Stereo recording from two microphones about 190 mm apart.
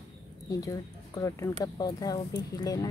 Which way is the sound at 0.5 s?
20° left (ahead or behind).